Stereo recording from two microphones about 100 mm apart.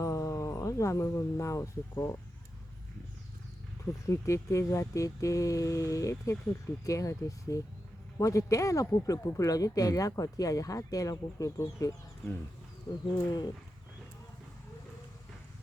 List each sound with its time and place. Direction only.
0.0 s speech: 30° left (ahead or behind)
3.8 s speech: 30° left (ahead or behind)